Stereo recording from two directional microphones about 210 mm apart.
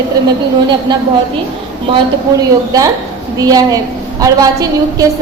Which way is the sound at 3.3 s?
15° right (ahead or behind).